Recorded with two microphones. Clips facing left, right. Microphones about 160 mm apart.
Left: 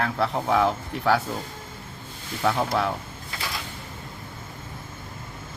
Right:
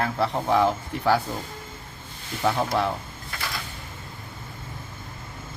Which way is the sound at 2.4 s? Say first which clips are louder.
Even; centre (ahead or behind).